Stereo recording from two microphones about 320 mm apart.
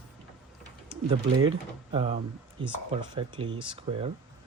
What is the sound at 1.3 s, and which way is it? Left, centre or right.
Speech, right.